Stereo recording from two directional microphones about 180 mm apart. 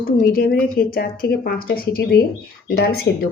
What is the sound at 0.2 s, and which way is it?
Speech, 60° left (ahead or behind).